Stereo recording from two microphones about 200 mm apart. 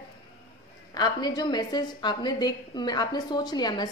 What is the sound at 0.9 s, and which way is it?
A woman's voice, 20° left (ahead or behind).